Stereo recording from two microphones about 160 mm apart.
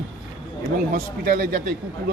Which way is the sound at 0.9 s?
55° right (ahead or behind).